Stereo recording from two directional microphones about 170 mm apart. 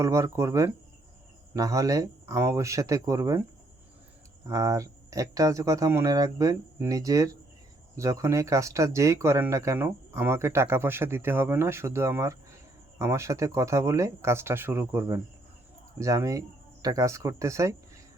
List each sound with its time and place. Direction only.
0.0 s speech: 15° right (ahead or behind)
4.4 s speech: 20° right (ahead or behind)